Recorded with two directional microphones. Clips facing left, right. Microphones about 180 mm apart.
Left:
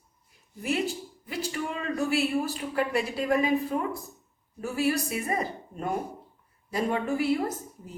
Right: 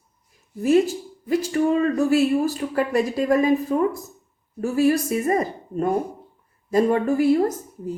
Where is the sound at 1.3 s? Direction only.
45° right (ahead or behind).